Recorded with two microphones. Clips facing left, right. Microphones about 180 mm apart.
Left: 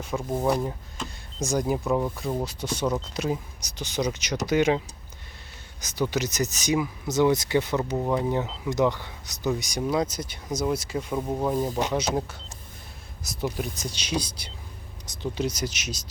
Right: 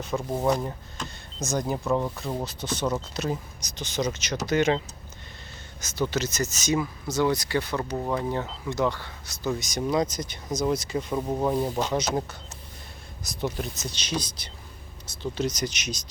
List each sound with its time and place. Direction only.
0.1 s speech: centre (ahead or behind)
5.8 s speech: 15° left (ahead or behind)
7.9 s speech: 10° left (ahead or behind)
11.2 s speech: 5° right (ahead or behind)
11.7 s speech: 5° left (ahead or behind)